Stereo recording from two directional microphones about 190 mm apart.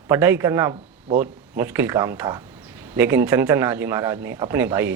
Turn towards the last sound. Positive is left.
turn(degrees=-10)  # may be behind; listen again after turning